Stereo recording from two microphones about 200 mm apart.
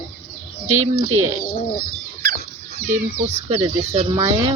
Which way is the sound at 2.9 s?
35° right (ahead or behind).